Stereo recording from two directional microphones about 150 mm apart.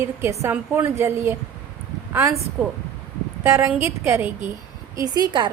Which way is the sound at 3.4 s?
15° right (ahead or behind).